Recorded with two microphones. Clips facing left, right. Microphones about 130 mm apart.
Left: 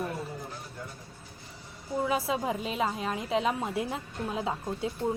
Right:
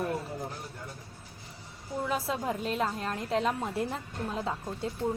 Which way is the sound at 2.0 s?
5° left (ahead or behind).